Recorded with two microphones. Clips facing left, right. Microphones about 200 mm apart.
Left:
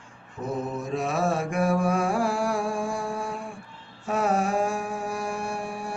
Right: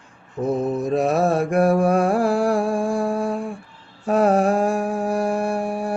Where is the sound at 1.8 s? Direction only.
60° right (ahead or behind).